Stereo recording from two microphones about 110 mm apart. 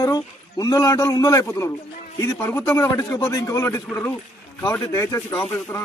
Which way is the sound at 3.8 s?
10° left (ahead or behind).